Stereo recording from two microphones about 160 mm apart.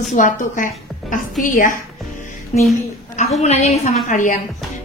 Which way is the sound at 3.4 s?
40° left (ahead or behind).